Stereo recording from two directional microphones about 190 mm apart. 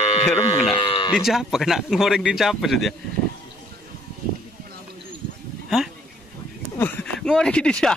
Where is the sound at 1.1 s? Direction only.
Centre (ahead or behind).